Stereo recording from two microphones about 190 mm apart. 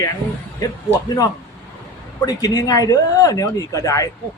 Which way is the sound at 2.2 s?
20° left (ahead or behind).